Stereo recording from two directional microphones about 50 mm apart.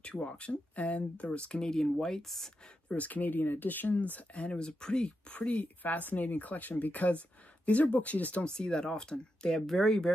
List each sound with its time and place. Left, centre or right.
0.0 s speech: left; by 2.5 s centre
2.9 s speech: left
5.6 s speech: left
8.5 s speech: centre